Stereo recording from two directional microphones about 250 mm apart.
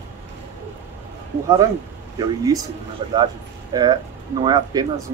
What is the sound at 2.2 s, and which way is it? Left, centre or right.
Speech, centre.